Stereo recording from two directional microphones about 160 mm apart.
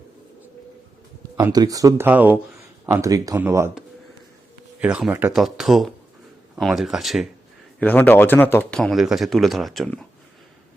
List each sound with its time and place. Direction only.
1.5 s speech: 20° right (ahead or behind)
4.8 s speech: 5° right (ahead or behind)
7.8 s speech: 10° left (ahead or behind)
8.8 s speech: centre (ahead or behind)